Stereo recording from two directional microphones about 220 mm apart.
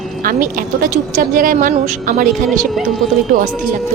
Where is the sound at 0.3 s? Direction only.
40° right (ahead or behind).